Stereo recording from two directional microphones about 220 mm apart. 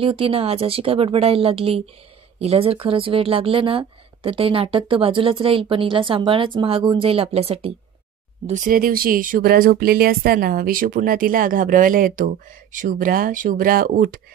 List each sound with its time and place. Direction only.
0.0 s speech: 25° right (ahead or behind); by 14.2 s 40° right (ahead or behind)